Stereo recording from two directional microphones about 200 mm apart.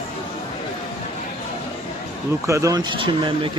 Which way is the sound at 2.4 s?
15° right (ahead or behind).